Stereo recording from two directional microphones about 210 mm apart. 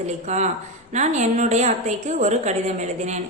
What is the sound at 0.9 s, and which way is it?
A woman's voice, 35° right (ahead or behind).